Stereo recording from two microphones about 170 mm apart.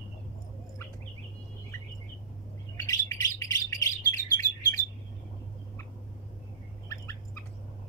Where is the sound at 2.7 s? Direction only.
20° left (ahead or behind).